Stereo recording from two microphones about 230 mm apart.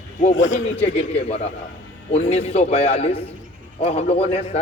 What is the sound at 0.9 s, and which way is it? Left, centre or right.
A man's voice, left.